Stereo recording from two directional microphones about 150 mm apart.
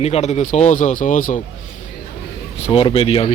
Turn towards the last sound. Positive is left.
turn(degrees=40)  # may be behind; listen again after turning